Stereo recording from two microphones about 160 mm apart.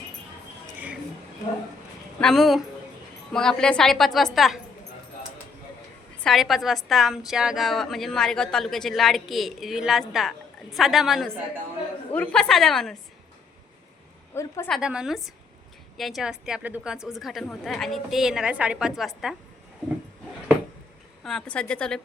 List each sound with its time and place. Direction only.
2.2 s a woman's voice: centre (ahead or behind)
6.2 s a woman's voice: centre (ahead or behind)
14.3 s a woman's voice: 15° left (ahead or behind)
14.7 s a woman's voice: 5° right (ahead or behind)
21.2 s a woman's voice: 5° left (ahead or behind)